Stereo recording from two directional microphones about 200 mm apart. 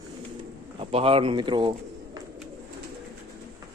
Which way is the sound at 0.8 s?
30° right (ahead or behind).